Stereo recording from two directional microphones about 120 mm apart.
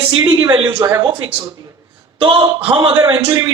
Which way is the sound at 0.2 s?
30° right (ahead or behind).